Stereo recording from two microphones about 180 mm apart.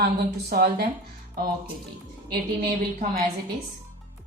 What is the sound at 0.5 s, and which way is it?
Speech, 60° right (ahead or behind).